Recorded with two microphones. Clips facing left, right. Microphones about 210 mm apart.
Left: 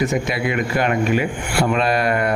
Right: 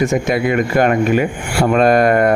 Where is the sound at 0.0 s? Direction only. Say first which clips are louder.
Right 5 dB; 45° right (ahead or behind).